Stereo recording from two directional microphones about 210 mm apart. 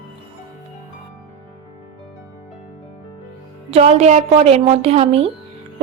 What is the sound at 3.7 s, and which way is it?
A woman's voice, 30° right (ahead or behind).